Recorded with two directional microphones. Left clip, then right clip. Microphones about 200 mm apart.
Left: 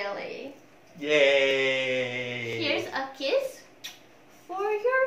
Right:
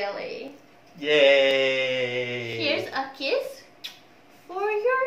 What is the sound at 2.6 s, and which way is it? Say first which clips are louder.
Speech: right 3 dB; 5° left (ahead or behind).